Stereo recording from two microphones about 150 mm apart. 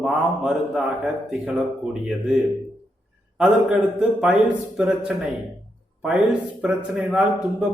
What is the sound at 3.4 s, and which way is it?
Speech, 5° right (ahead or behind).